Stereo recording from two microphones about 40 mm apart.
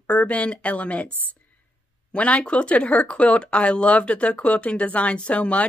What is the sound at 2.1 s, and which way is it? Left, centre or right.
Speech, left.